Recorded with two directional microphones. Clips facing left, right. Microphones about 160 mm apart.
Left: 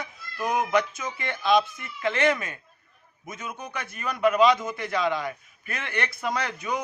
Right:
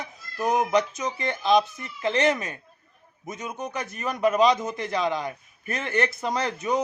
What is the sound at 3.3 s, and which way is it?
Speech, 20° right (ahead or behind).